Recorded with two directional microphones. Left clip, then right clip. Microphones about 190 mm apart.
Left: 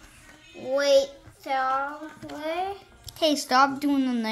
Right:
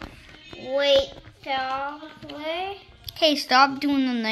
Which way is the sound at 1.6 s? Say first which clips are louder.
Left 5 dB; 10° left (ahead or behind).